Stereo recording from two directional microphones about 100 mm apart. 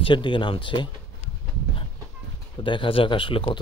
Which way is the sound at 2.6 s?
55° left (ahead or behind).